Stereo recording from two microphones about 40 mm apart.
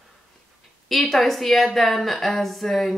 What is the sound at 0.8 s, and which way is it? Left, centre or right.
Speech, centre.